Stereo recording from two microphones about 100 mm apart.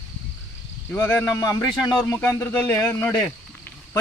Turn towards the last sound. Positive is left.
turn(degrees=20)  # may be behind; listen again after turning